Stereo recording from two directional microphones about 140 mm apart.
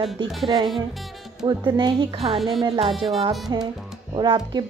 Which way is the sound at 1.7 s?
35° right (ahead or behind).